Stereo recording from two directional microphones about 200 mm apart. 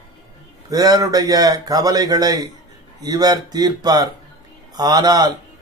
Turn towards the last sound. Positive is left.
turn(degrees=-20)  # may be behind; listen again after turning